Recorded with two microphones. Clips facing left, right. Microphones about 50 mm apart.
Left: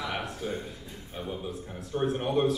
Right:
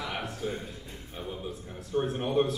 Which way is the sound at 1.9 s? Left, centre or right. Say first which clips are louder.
Even; centre.